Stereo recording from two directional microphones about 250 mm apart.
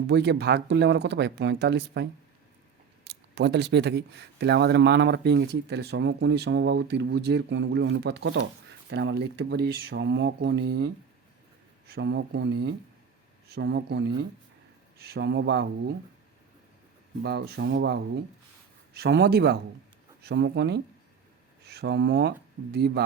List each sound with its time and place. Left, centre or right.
0.1 s speech: right
17.2 s speech: right